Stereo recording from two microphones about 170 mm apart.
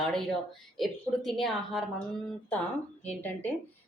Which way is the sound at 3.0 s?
10° left (ahead or behind).